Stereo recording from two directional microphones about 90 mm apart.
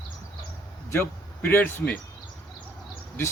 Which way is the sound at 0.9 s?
25° left (ahead or behind).